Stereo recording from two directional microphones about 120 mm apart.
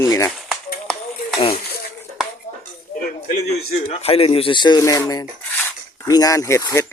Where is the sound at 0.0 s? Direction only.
25° left (ahead or behind).